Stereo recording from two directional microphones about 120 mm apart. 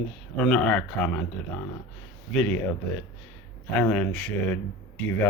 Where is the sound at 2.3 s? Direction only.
10° left (ahead or behind).